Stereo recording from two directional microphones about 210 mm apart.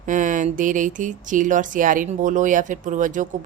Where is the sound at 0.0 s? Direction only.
40° right (ahead or behind).